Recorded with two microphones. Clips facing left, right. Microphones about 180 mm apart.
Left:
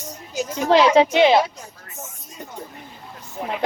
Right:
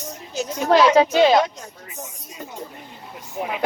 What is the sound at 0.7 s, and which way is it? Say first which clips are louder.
Speech: even; 25° left (ahead or behind).